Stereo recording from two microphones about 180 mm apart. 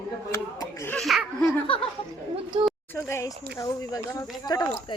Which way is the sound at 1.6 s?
30° left (ahead or behind).